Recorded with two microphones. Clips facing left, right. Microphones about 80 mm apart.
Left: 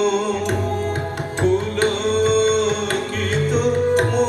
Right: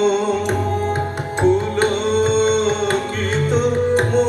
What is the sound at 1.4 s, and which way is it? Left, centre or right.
Music, right.